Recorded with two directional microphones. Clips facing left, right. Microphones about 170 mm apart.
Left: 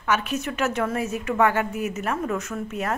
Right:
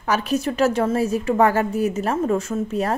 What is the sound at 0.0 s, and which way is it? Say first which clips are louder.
A woman's voice: right 4 dB; 35° right (ahead or behind).